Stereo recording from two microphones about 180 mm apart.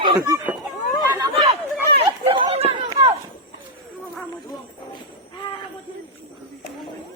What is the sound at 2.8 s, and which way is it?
Run, 30° right (ahead or behind).